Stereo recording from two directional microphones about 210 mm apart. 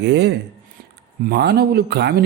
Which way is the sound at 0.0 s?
55° right (ahead or behind).